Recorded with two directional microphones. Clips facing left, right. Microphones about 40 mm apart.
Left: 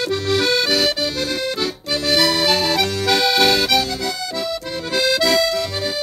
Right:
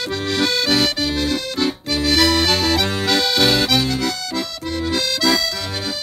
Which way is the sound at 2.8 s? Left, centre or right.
Right.